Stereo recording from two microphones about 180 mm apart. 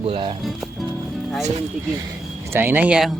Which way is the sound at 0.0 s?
30° right (ahead or behind).